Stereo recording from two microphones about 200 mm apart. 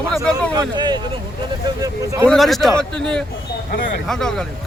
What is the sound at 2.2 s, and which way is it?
Speech, centre (ahead or behind).